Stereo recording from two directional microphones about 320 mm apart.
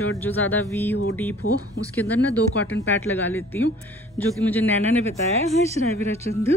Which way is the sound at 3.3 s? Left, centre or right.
Centre.